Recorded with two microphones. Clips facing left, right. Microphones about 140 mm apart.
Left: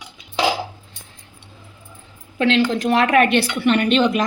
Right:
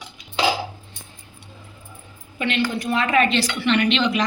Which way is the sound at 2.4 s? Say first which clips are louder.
Left 6 dB; 90° left.